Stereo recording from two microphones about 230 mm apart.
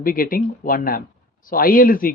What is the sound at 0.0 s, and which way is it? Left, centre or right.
Speech, left.